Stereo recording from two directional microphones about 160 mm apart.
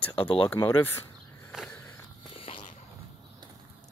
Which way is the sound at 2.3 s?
35° left (ahead or behind).